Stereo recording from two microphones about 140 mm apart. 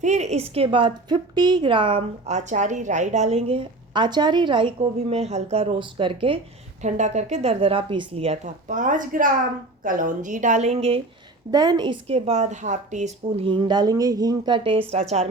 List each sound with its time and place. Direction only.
0.0 s a woman's voice: 55° right (ahead or behind); by 6.4 s 40° right (ahead or behind)
6.8 s a woman's voice: 55° right (ahead or behind)
11.5 s a woman's voice: 30° right (ahead or behind)
12.0 s a woman's voice: 45° right (ahead or behind)